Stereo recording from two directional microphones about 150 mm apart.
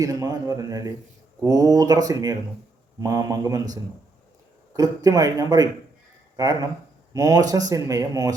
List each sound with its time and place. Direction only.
0.0 s a man's voice: 25° right (ahead or behind)
4.8 s a man's voice: 25° right (ahead or behind)